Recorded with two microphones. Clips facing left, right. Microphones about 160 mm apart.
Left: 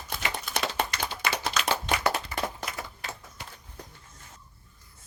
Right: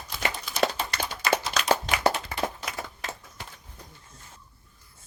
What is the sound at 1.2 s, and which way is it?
Clapping, 40° right (ahead or behind).